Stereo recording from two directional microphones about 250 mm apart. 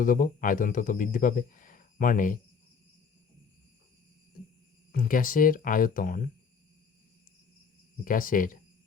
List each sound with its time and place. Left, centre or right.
0.0 s speech: left
4.9 s speech: left
8.0 s speech: left